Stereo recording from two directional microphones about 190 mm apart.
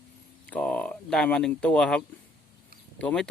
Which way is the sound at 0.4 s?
5° left (ahead or behind).